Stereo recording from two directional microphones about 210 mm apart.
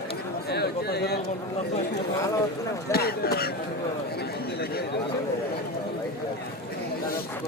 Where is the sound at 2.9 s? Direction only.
50° left (ahead or behind).